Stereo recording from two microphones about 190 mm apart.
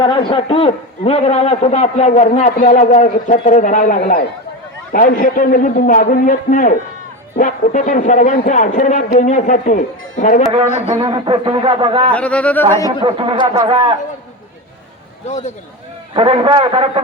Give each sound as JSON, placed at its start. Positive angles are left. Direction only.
{"t": 0.0, "sound": "a man's voice", "side_deg": 25}
{"t": 11.1, "sound": "a man's voice", "side_deg": -25}
{"t": 12.1, "sound": "speech", "side_deg": 5}
{"t": 13.1, "sound": "a man's voice", "side_deg": -25}
{"t": 15.3, "sound": "a man's voice", "side_deg": 35}
{"t": 16.1, "sound": "a man's voice", "side_deg": -25}